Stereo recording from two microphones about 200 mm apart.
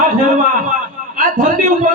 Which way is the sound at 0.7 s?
40° right (ahead or behind).